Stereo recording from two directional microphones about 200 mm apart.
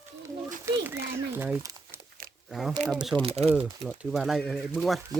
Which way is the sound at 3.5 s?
5° right (ahead or behind).